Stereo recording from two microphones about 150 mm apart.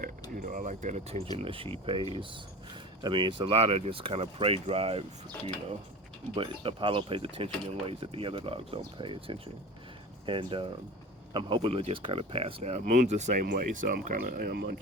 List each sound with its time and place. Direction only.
0.0 s speech: 65° right (ahead or behind); by 5.0 s 40° right (ahead or behind)
6.3 s speech: 35° right (ahead or behind); by 13.4 s 50° right (ahead or behind)
13.4 s speech: 75° right (ahead or behind); by 14.8 s 90° right